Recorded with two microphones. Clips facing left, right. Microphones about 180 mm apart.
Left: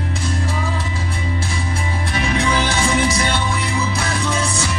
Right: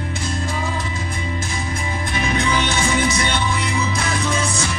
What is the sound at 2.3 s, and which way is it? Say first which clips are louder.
Music: left 2 dB; 35° left (ahead or behind).